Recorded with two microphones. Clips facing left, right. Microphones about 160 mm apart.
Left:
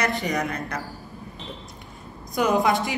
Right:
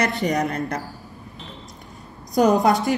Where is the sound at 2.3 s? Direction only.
40° right (ahead or behind).